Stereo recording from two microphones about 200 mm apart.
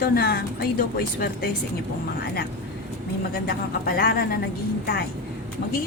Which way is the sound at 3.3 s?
50° left (ahead or behind).